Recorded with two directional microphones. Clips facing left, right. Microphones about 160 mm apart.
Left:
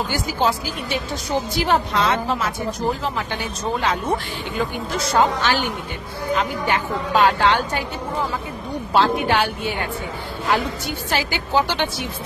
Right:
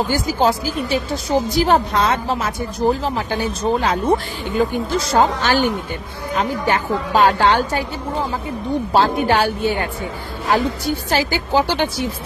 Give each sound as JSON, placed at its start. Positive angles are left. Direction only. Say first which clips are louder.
{"t": 0.4, "sound": "a woman's voice", "louder": "right 3 dB", "side_deg": -40}
{"t": 5.4, "sound": "a woman's voice", "louder": "right 4 dB", "side_deg": -45}
{"t": 11.1, "sound": "a woman's voice", "louder": "right 3 dB", "side_deg": -40}